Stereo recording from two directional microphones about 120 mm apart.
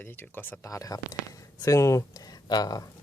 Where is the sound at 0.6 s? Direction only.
30° left (ahead or behind).